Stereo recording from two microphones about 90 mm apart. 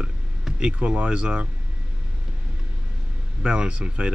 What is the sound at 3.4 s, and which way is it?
Speech, 10° right (ahead or behind).